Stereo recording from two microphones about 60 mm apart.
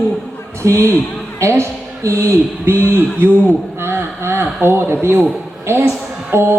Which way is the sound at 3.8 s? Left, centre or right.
Right.